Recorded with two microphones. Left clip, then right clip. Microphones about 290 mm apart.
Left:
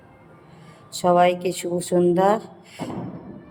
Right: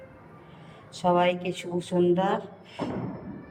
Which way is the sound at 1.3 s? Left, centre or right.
Left.